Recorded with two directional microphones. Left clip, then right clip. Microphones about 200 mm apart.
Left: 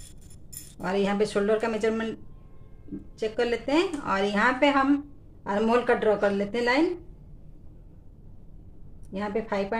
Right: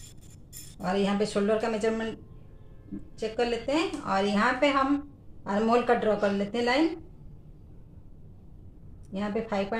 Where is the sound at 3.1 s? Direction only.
35° left (ahead or behind).